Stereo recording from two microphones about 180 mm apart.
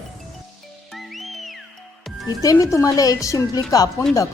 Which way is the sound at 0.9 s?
Centre (ahead or behind).